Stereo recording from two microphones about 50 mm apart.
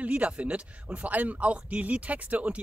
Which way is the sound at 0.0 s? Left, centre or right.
Right.